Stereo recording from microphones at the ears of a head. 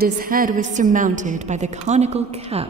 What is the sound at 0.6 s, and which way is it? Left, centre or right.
A woman's voice, right.